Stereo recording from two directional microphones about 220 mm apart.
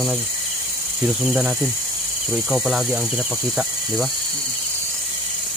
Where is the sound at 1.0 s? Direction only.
5° right (ahead or behind).